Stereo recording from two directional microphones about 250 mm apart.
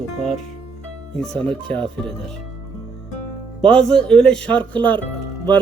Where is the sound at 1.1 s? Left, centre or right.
Centre.